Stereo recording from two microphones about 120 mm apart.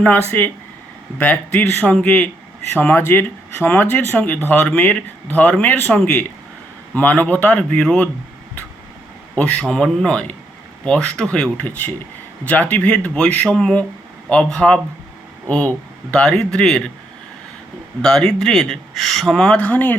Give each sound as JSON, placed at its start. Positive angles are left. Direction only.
{"t": 0.3, "sound": "speech", "side_deg": 15}
{"t": 9.3, "sound": "speech", "side_deg": 10}
{"t": 18.0, "sound": "speech", "side_deg": 5}